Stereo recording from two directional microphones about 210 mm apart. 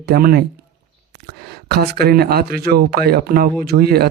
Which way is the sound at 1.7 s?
50° right (ahead or behind).